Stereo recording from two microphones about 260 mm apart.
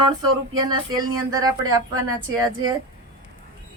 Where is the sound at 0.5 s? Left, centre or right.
Centre.